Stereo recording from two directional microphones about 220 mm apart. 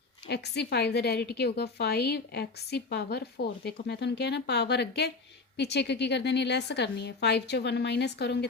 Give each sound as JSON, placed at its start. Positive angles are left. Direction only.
{"t": 0.3, "sound": "a woman's voice", "side_deg": 50}